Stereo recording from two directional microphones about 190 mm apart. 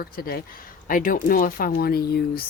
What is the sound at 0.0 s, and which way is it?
Speech, 50° left (ahead or behind).